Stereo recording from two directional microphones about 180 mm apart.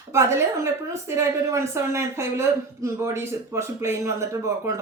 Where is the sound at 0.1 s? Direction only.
15° right (ahead or behind).